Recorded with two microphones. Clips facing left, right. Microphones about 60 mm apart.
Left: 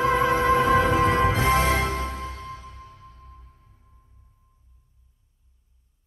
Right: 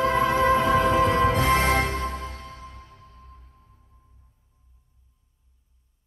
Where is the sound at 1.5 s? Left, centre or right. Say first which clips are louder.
Even; right.